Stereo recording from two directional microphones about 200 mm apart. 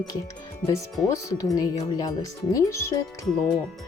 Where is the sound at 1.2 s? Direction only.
15° left (ahead or behind).